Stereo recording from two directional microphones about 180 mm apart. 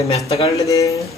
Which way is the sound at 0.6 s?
20° left (ahead or behind).